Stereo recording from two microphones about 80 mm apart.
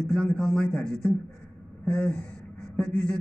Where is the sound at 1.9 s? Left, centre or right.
Centre.